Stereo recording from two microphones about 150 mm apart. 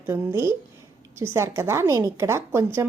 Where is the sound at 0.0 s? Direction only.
15° right (ahead or behind).